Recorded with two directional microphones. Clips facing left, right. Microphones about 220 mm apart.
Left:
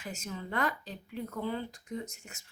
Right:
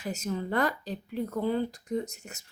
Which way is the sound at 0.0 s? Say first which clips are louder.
Right 8 dB; 40° right (ahead or behind).